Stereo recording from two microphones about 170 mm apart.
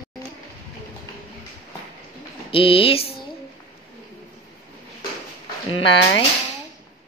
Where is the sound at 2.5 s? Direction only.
30° left (ahead or behind).